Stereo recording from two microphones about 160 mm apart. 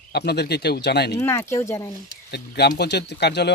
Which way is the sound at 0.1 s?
90° left.